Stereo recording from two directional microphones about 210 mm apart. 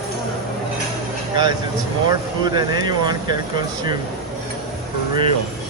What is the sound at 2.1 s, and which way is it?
Speech, 20° right (ahead or behind).